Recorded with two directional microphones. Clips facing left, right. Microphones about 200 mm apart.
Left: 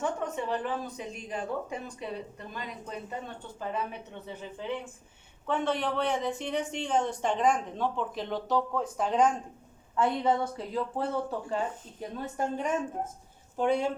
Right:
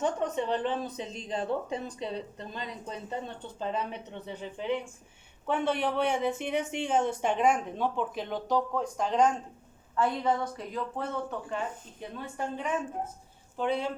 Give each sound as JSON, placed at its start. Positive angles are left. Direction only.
{"t": 0.0, "sound": "speech", "side_deg": -20}
{"t": 5.8, "sound": "a woman's voice", "side_deg": -10}
{"t": 9.9, "sound": "speech", "side_deg": 25}